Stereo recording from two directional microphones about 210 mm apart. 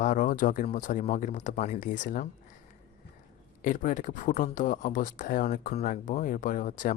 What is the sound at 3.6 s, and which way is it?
Speech, 40° left (ahead or behind).